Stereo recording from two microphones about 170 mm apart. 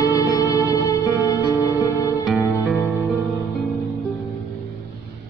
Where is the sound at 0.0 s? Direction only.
20° left (ahead or behind).